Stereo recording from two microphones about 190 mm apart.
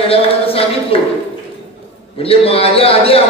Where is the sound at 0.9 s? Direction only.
30° left (ahead or behind).